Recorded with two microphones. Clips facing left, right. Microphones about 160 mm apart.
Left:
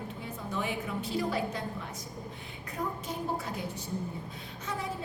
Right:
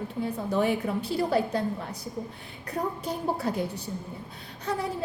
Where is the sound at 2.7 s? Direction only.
35° right (ahead or behind).